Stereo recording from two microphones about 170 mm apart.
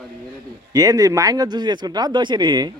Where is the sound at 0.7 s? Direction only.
20° right (ahead or behind).